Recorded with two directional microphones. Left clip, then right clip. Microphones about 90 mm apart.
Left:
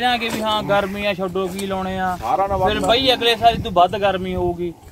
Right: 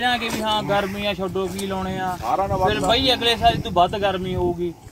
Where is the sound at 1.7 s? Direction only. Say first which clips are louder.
Left 6 dB; 15° right (ahead or behind).